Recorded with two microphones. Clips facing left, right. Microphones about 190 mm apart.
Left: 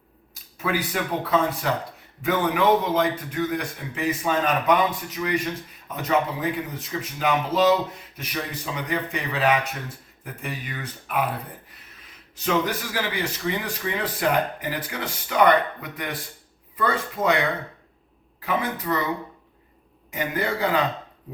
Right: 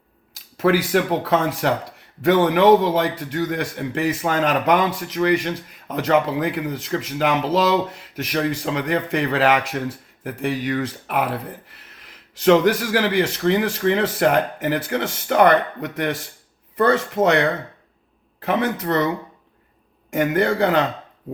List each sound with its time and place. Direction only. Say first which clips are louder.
0.3 s a man's voice: right 8 dB; 80° right
12.0 s speech: right 11 dB; 85° right
18.3 s speech: right 5 dB; 70° right (ahead or behind)
20.3 s speech: right 5 dB; 75° right (ahead or behind)